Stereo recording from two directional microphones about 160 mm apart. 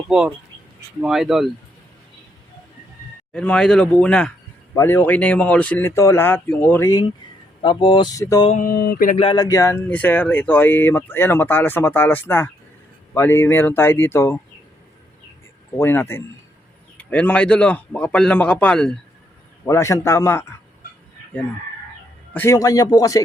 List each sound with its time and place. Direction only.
1.0 s speech: centre (ahead or behind)
3.3 s speech: 5° left (ahead or behind)
4.7 s speech: 15° left (ahead or behind)
7.6 s speech: 30° left (ahead or behind)
8.5 s a sound: 65° left (ahead or behind)
9.0 s a sound: 40° left (ahead or behind)
9.3 s speech: 20° left (ahead or behind)
15.8 s speech: 15° left (ahead or behind)
19.6 s speech: 20° left (ahead or behind)
22.3 s a man's voice: 10° left (ahead or behind)
22.5 s speech: 20° left (ahead or behind)